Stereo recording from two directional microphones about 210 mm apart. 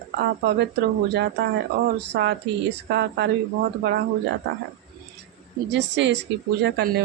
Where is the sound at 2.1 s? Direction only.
50° right (ahead or behind).